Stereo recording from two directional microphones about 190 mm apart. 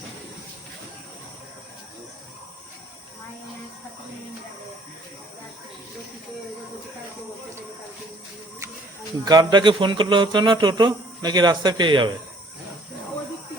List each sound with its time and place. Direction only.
9.2 s speech: 20° right (ahead or behind)